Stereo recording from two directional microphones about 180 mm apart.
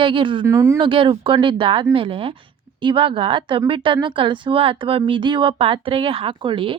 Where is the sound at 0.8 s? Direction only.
30° right (ahead or behind).